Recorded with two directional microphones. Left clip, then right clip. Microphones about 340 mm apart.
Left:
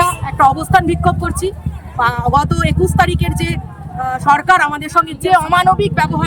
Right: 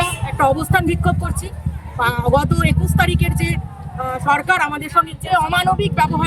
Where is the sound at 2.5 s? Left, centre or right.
Left.